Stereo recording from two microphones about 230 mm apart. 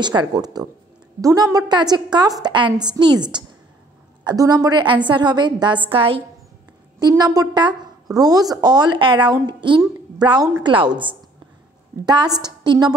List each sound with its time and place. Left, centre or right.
0.0 s a woman's voice: centre
4.2 s a woman's voice: centre
12.4 s a woman's voice: centre